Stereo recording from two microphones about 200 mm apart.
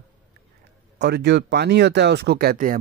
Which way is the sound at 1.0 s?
60° right (ahead or behind).